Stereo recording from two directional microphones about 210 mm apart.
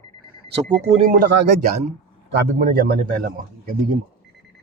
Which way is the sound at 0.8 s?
40° right (ahead or behind).